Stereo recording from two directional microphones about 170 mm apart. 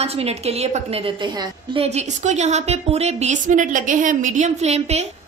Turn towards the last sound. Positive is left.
turn(degrees=-40)  # may be behind; listen again after turning